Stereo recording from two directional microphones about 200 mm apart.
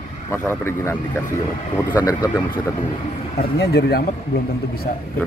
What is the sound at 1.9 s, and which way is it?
Speech, 20° left (ahead or behind).